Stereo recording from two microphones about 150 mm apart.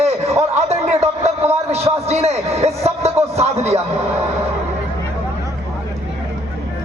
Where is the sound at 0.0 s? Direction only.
45° right (ahead or behind).